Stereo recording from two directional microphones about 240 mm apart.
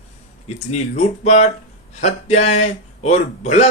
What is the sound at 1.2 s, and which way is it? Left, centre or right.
Speech, left.